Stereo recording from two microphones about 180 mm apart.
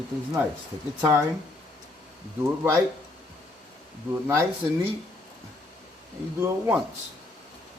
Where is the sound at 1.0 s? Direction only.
10° right (ahead or behind).